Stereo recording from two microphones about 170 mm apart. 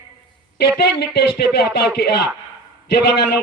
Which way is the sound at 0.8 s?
65° left (ahead or behind).